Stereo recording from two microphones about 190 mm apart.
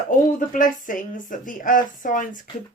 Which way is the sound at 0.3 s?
45° left (ahead or behind).